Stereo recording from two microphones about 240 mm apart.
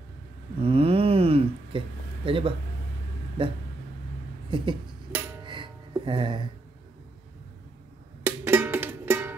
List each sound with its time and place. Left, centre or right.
0.6 s a sound: right
2.2 s speech: right
5.4 s music: centre
8.3 s music: centre